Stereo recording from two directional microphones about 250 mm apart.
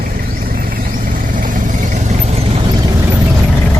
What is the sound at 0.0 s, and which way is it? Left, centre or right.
Vehicle, right.